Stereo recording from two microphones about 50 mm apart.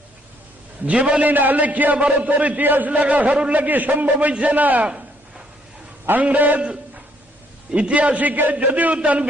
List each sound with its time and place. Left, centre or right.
0.9 s a man's voice: right
1.3 s a man's voice: right
3.5 s a man's voice: right
6.2 s a man's voice: right
6.6 s a sound: right
7.7 s a man's voice: right